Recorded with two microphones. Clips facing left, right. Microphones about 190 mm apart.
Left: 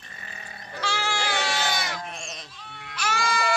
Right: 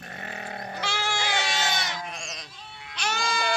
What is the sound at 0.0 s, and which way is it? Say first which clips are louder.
Livestock: right 8 dB; 70° right (ahead or behind).